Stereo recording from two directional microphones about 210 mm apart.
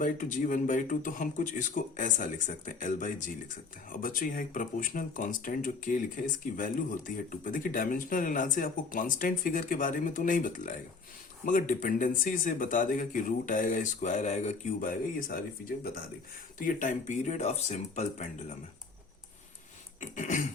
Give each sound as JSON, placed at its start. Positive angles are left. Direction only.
{"t": 0.0, "sound": "speech", "side_deg": 40}
{"t": 15.3, "sound": "speech", "side_deg": 45}
{"t": 20.0, "sound": "speech", "side_deg": 35}